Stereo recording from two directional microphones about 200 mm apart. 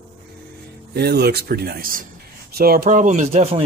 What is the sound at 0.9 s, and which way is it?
Speech, 55° right (ahead or behind).